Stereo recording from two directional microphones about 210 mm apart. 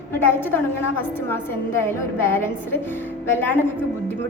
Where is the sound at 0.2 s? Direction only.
10° left (ahead or behind).